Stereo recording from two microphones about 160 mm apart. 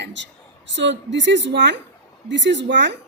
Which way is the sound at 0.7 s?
90° right.